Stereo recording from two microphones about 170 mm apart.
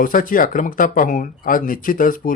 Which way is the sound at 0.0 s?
55° left (ahead or behind).